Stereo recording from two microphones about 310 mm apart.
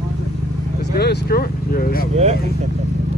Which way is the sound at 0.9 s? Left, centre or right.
Left.